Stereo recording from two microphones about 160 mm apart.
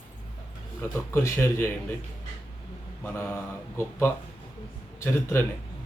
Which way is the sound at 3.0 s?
15° left (ahead or behind).